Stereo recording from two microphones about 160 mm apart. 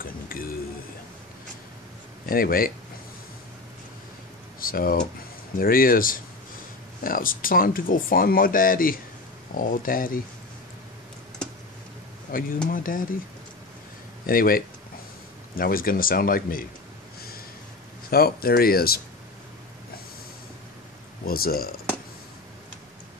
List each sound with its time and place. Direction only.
0.0 s speech: 65° left (ahead or behind)
2.2 s speech: 65° left (ahead or behind)
4.6 s speech: 65° left (ahead or behind)
12.3 s speech: 60° left (ahead or behind)
14.2 s speech: 65° left (ahead or behind)
18.1 s speech: 75° left (ahead or behind)
21.3 s speech: 65° left (ahead or behind)